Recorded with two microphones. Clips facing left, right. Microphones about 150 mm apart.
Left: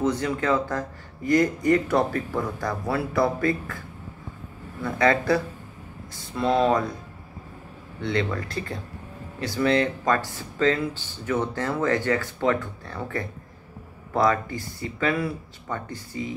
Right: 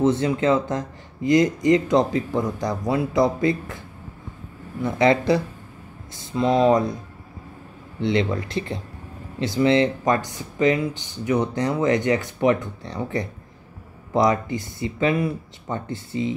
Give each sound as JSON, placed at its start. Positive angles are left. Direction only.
{"t": 0.0, "sound": "speech", "side_deg": -25}
{"t": 4.8, "sound": "speech", "side_deg": -20}
{"t": 8.0, "sound": "speech", "side_deg": -25}